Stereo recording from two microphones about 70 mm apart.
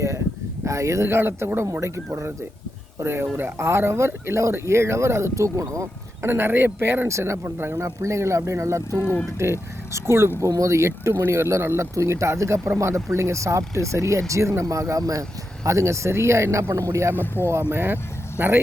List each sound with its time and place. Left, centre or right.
0.6 s speech: right
3.0 s speech: right
6.2 s speech: right
9.0 s speech: left
9.4 s speech: right
12.6 s speech: right
12.9 s speech: right
17.2 s speech: left
17.5 s speech: right